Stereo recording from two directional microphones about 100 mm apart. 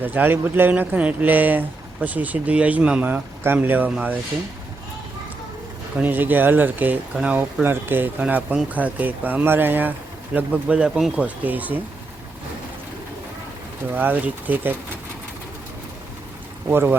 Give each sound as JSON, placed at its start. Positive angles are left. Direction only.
{"t": 0.0, "sound": "speech", "side_deg": -20}
{"t": 6.0, "sound": "speech", "side_deg": -20}
{"t": 11.4, "sound": "speech", "side_deg": -15}
{"t": 13.9, "sound": "speech", "side_deg": -20}
{"t": 16.6, "sound": "speech", "side_deg": -20}